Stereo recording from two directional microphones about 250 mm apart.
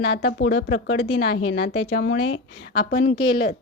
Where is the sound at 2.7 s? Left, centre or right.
Left.